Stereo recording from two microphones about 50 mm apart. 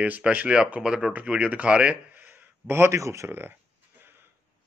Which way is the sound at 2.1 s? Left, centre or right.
Right.